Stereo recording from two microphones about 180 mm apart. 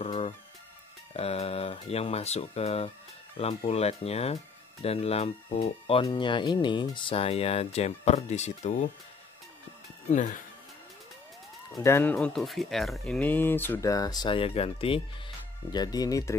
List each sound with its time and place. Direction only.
0.0 s music: 35° left (ahead or behind)
1.1 s speech: 35° left (ahead or behind)
10.0 s speech: 45° left (ahead or behind)
11.7 s speech: 15° left (ahead or behind)